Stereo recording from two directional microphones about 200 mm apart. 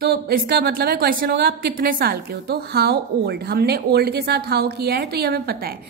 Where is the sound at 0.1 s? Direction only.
50° right (ahead or behind).